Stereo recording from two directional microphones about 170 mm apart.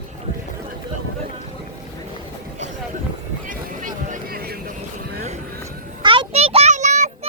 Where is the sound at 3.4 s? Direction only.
50° right (ahead or behind).